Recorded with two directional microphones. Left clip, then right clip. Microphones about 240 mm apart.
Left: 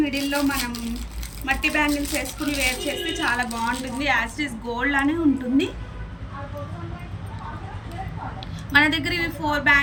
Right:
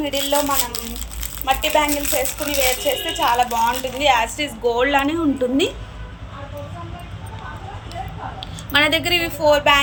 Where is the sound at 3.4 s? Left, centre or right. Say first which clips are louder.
Right 7 dB; centre.